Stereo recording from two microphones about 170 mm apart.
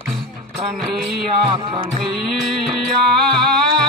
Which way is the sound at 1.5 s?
30° right (ahead or behind).